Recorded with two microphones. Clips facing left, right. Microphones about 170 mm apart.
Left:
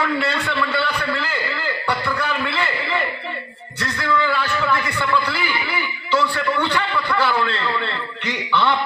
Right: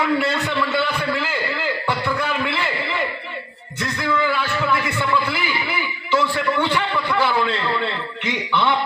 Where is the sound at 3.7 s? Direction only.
20° right (ahead or behind).